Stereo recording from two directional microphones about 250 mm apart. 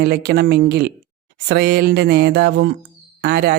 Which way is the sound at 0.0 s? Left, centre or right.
Right.